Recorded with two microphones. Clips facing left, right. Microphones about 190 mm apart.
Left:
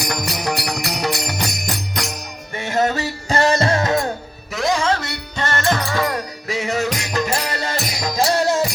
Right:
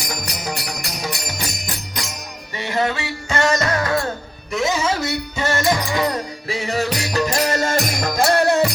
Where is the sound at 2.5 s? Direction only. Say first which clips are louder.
Left 2 dB; 45° left (ahead or behind); by 4.1 s 20° left (ahead or behind).